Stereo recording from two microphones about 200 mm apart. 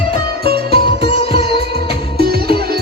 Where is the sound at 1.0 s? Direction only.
25° left (ahead or behind).